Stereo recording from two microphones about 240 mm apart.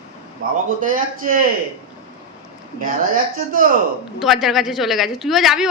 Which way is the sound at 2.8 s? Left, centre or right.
Right.